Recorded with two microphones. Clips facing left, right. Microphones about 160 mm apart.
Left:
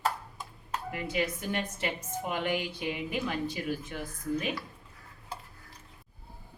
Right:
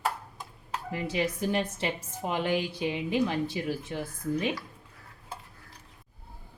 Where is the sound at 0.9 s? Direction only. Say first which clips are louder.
Right 2 dB; 30° right (ahead or behind).